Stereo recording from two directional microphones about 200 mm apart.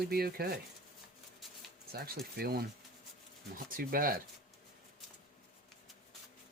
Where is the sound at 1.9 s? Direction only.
50° right (ahead or behind).